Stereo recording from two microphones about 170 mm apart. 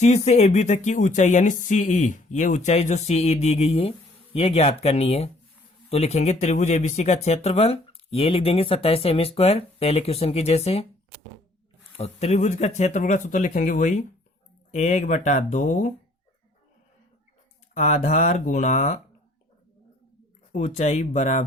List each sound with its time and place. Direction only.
0.0 s speech: 40° left (ahead or behind)
11.9 s speech: 40° left (ahead or behind)
17.7 s speech: 45° left (ahead or behind)
20.5 s speech: 45° left (ahead or behind)